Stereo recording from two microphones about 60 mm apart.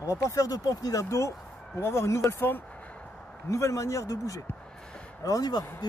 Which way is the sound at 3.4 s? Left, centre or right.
Left.